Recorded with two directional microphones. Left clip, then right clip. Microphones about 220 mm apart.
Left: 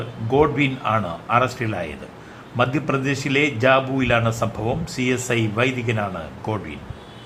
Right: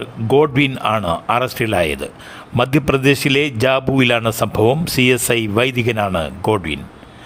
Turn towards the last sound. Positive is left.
turn(degrees=-45)  # may be behind; listen again after turning